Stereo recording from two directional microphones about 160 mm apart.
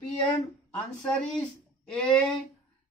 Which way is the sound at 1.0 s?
5° left (ahead or behind).